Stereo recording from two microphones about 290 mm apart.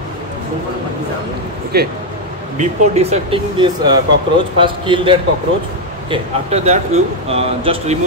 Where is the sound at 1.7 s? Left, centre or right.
Right.